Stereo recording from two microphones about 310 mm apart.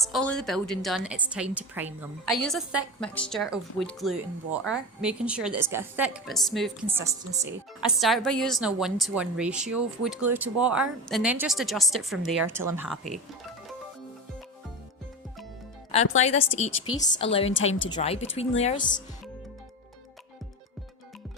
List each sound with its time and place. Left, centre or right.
0.0 s a woman's voice: centre
15.9 s speech: left